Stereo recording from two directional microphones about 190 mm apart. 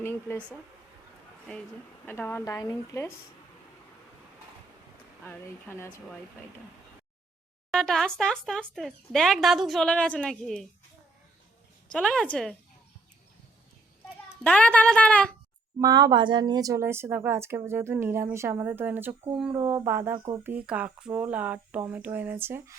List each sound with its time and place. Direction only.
0.0 s a woman's voice: 10° left (ahead or behind)
2.0 s a woman's voice: 10° left (ahead or behind)
5.2 s a woman's voice: 10° left (ahead or behind)
7.7 s speech: centre (ahead or behind)
11.9 s speech: 5° left (ahead or behind)
14.4 s a woman's voice: 5° left (ahead or behind)
15.8 s a woman's voice: 20° right (ahead or behind)
20.1 s speech: 25° right (ahead or behind)
20.4 s a woman's voice: 10° right (ahead or behind)